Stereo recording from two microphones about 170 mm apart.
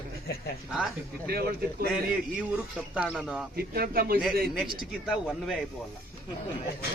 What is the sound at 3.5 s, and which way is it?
Speech, 60° right (ahead or behind).